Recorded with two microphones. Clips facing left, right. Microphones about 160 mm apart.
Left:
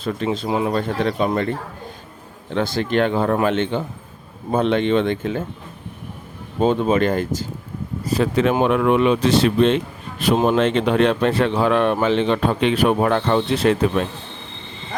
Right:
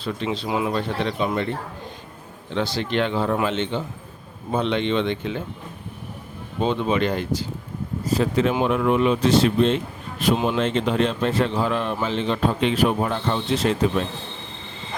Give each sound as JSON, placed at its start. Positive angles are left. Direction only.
{"t": 0.0, "sound": "speech", "side_deg": 45}
{"t": 0.4, "sound": "a man's voice", "side_deg": 30}
{"t": 0.8, "sound": "speech", "side_deg": 45}
{"t": 2.6, "sound": "speech", "side_deg": 50}
{"t": 6.6, "sound": "speech", "side_deg": 45}
{"t": 8.0, "sound": "a man's voice", "side_deg": 70}
{"t": 10.3, "sound": "speech", "side_deg": 45}
{"t": 10.6, "sound": "a man's voice", "side_deg": 70}